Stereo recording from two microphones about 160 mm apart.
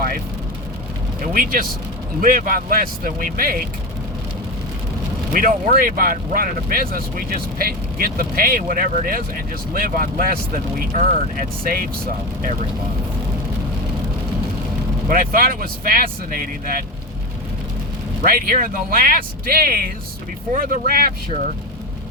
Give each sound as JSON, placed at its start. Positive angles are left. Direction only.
{"t": 1.2, "sound": "speech", "side_deg": -60}
{"t": 5.3, "sound": "speech", "side_deg": -60}
{"t": 15.1, "sound": "speech", "side_deg": -60}
{"t": 18.3, "sound": "speech", "side_deg": -65}